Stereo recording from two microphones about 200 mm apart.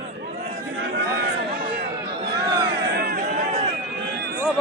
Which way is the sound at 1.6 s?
50° right (ahead or behind).